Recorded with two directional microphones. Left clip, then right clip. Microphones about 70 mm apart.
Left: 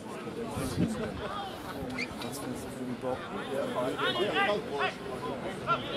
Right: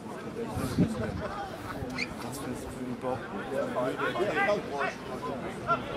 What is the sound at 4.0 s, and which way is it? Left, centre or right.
Speech, centre.